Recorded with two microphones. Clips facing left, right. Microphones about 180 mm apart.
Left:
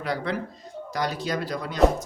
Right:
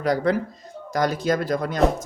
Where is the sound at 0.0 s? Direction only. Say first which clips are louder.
Right 7 dB; 40° right (ahead or behind).